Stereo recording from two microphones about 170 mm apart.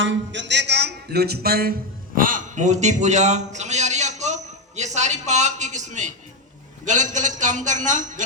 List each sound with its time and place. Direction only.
0.0 s speech: 90° right; by 1.7 s 65° right (ahead or behind)
2.1 s a sound: 50° right (ahead or behind)
6.8 s a man's voice: 45° right (ahead or behind)